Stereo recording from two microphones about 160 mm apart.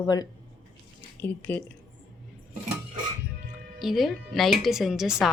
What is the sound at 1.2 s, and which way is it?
Speech, 10° left (ahead or behind).